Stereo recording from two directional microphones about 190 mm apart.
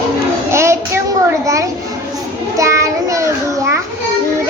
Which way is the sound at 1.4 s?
15° right (ahead or behind).